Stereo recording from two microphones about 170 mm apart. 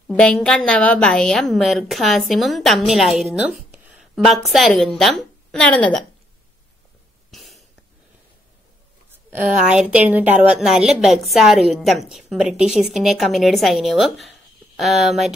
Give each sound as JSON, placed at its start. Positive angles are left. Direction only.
{"t": 0.1, "sound": "a woman's voice", "side_deg": 5}
{"t": 7.2, "sound": "cough", "side_deg": 0}
{"t": 9.7, "sound": "a woman's voice", "side_deg": -5}